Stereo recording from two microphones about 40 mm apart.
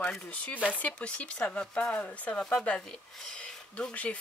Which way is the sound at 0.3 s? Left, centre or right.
Left.